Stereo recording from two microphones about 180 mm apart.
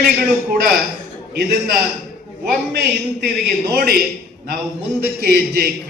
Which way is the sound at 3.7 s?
55° right (ahead or behind).